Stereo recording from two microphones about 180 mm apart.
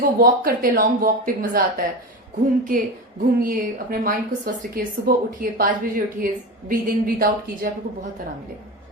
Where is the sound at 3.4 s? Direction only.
50° right (ahead or behind).